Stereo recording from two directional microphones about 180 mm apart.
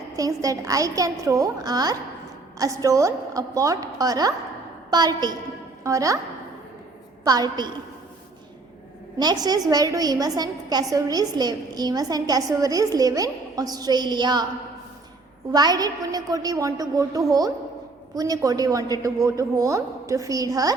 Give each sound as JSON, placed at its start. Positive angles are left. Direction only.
{"t": 0.2, "sound": "a woman's voice", "side_deg": -20}
{"t": 7.3, "sound": "a woman's voice", "side_deg": -20}
{"t": 9.1, "sound": "a woman's voice", "side_deg": -20}
{"t": 15.5, "sound": "a woman's voice", "side_deg": -20}